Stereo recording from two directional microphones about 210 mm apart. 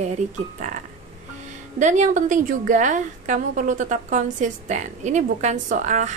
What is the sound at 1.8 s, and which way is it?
A woman's voice, 35° right (ahead or behind).